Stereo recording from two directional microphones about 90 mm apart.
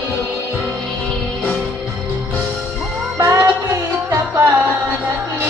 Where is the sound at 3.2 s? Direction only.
30° right (ahead or behind).